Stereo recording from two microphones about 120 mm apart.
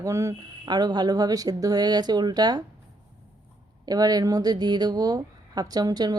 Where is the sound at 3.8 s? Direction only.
30° right (ahead or behind).